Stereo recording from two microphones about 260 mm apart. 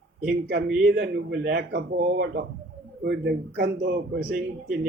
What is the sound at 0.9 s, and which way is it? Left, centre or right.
A man's voice, right.